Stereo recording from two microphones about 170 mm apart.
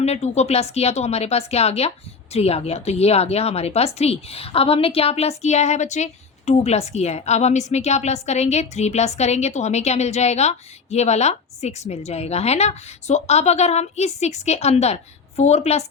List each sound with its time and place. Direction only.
0.0 s speech: 40° left (ahead or behind)